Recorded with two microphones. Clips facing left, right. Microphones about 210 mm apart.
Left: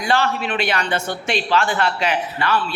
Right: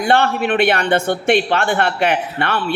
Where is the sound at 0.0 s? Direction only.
60° right (ahead or behind).